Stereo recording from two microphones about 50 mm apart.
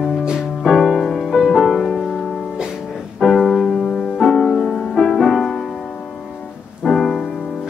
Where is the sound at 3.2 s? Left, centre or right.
Centre.